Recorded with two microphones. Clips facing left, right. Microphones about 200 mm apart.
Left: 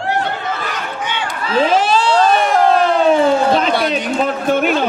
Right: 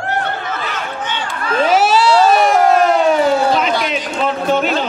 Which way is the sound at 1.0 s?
10° left (ahead or behind).